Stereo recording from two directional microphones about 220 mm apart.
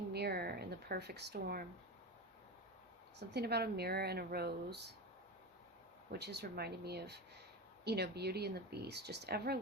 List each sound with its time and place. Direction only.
0.1 s a sound: 45° right (ahead or behind)
3.2 s speech: 50° right (ahead or behind)
6.1 s speech: 50° right (ahead or behind)